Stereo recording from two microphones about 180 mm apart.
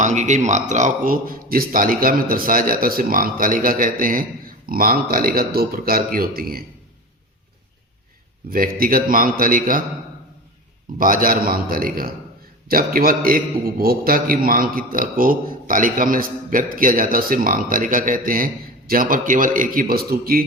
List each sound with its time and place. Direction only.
0.0 s speech: 40° right (ahead or behind)
8.4 s speech: 55° right (ahead or behind)
10.9 s speech: 50° right (ahead or behind)